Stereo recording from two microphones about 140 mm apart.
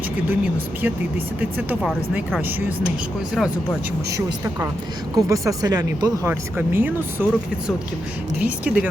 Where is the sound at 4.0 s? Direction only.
20° right (ahead or behind).